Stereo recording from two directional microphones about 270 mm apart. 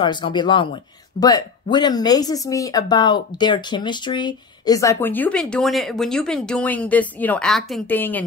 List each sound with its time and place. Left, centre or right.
0.0 s speech: centre